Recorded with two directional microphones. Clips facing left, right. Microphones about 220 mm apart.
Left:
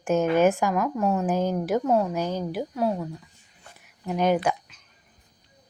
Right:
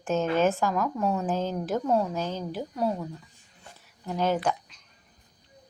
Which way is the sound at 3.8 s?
15° left (ahead or behind).